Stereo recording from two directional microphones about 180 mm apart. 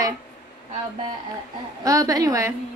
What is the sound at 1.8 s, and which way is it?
Speech, 20° right (ahead or behind).